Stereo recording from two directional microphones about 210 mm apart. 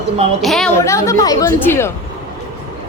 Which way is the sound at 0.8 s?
15° left (ahead or behind).